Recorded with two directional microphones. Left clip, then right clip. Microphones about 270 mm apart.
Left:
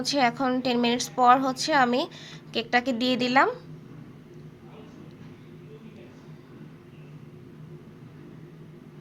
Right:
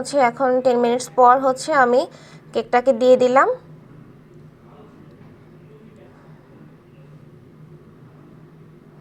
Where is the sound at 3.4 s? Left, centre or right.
Centre.